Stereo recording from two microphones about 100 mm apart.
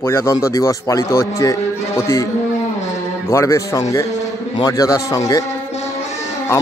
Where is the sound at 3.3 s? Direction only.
30° left (ahead or behind).